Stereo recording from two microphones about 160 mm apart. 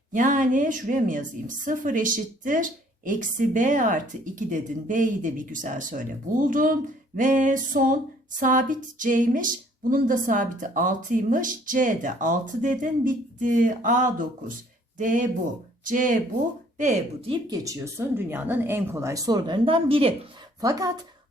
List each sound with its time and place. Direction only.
0.1 s a woman's voice: 55° right (ahead or behind); by 17.4 s 35° right (ahead or behind)
17.5 s speech: 20° right (ahead or behind)
20.6 s speech: 25° right (ahead or behind)